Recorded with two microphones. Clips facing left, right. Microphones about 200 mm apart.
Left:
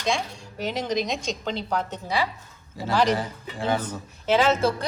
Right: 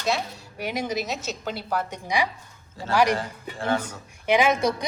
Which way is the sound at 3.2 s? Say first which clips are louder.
Left 1 dB; 10° left (ahead or behind).